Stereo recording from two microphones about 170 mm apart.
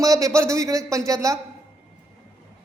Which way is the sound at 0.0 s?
20° right (ahead or behind).